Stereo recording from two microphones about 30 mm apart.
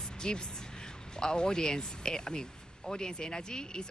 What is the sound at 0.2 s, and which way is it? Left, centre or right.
Speech, left.